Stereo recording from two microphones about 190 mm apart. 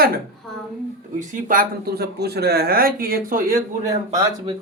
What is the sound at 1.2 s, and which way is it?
Speech, 45° right (ahead or behind).